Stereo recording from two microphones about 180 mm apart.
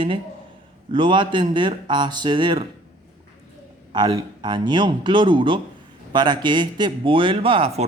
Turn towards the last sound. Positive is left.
turn(degrees=-30)  # may be behind; listen again after turning